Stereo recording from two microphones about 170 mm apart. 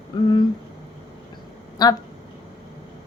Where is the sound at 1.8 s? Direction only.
25° left (ahead or behind).